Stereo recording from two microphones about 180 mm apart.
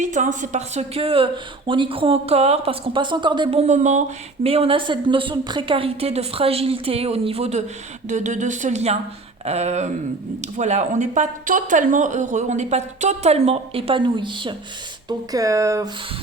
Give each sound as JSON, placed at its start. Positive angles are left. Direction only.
{"t": 0.0, "sound": "speech", "side_deg": -45}